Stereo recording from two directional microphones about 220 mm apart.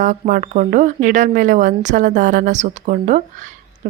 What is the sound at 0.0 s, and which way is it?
Speech, 35° right (ahead or behind).